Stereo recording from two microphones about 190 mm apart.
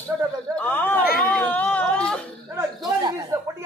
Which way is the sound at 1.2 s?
5° left (ahead or behind).